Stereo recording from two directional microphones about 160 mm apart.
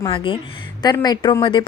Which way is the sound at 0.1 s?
30° left (ahead or behind).